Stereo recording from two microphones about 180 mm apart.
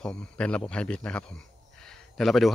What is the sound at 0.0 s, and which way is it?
Speech, 5° left (ahead or behind).